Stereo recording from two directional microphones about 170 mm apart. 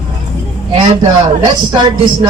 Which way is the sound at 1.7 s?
25° right (ahead or behind).